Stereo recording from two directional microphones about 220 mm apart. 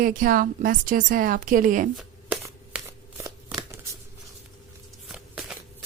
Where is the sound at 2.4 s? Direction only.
10° right (ahead or behind).